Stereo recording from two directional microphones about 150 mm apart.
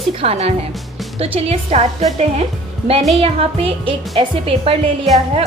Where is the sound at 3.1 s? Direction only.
40° right (ahead or behind).